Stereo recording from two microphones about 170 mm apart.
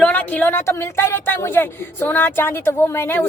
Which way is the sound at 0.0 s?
10° left (ahead or behind).